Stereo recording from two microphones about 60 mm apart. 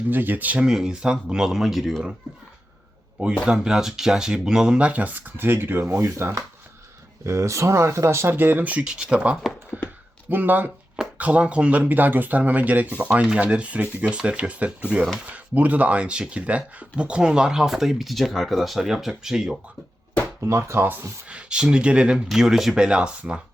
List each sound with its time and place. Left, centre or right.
0.1 s speech: right
0.6 s speech: centre
3.4 s speech: centre
4.8 s speech: right
7.3 s speech: right
8.3 s speech: right
8.9 s speech: centre; by 10.7 s right
11.2 s speech: right
20.4 s speech: right
21.2 s speech: centre
22.3 s speech: centre